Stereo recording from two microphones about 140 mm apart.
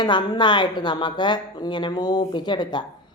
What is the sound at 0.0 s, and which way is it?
Speech, 30° left (ahead or behind).